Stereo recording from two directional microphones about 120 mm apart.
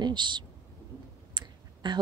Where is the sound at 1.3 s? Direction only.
40° right (ahead or behind).